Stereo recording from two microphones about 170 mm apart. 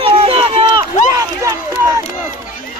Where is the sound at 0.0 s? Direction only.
35° right (ahead or behind); by 2.3 s 15° right (ahead or behind).